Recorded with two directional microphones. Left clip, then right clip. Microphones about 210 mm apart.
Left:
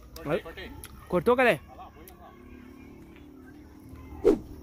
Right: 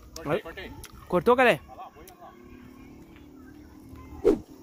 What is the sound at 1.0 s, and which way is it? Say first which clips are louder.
Speech: right 2 dB; 5° right (ahead or behind).